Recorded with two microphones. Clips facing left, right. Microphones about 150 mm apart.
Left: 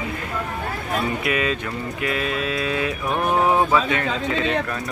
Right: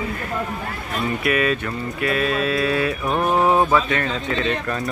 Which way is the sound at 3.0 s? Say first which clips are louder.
Even; 5° left (ahead or behind).